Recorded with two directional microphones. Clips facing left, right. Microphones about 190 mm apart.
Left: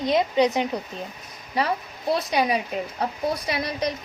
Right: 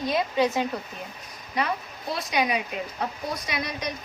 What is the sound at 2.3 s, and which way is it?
A woman's voice, 35° left (ahead or behind).